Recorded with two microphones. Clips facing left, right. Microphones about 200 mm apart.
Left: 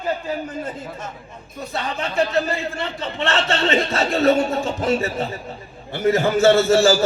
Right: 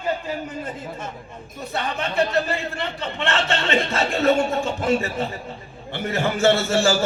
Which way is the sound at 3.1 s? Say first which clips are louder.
Left 3 dB; 35° left (ahead or behind).